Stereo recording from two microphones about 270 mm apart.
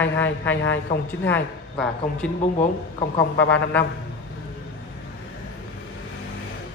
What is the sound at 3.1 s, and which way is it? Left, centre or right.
Speech, centre.